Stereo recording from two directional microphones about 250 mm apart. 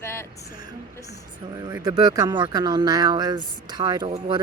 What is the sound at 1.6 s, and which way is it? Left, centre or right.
Speech, centre.